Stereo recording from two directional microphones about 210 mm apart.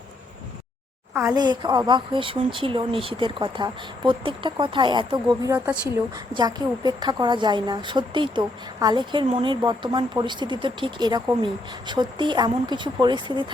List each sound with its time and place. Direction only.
1.1 s speech: 10° right (ahead or behind)
6.3 s speech: 20° right (ahead or behind)